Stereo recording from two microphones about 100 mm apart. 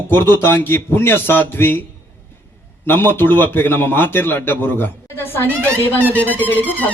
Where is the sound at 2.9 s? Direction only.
20° left (ahead or behind).